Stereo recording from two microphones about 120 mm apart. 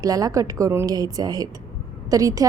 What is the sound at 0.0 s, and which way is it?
A woman's voice, 30° right (ahead or behind).